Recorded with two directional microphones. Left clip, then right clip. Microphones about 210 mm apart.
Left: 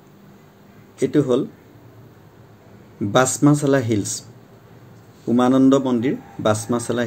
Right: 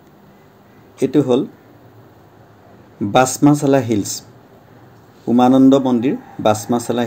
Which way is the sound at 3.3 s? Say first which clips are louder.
Right 3 dB; 10° right (ahead or behind).